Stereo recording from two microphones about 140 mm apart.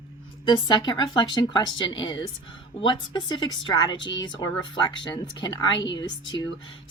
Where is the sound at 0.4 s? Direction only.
35° left (ahead or behind).